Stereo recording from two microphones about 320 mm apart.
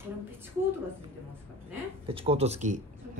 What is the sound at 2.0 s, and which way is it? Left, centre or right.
Speech, centre.